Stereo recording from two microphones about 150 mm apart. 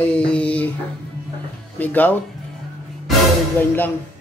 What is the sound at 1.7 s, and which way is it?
Speech, 10° left (ahead or behind).